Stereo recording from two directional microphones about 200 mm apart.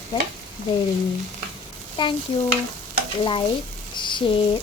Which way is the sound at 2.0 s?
25° left (ahead or behind).